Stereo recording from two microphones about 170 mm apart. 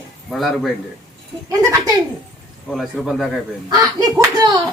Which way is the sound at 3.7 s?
20° right (ahead or behind).